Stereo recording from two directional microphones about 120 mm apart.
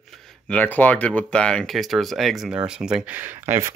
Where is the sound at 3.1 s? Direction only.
15° right (ahead or behind).